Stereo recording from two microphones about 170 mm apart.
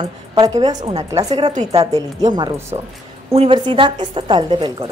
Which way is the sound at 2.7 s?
25° right (ahead or behind).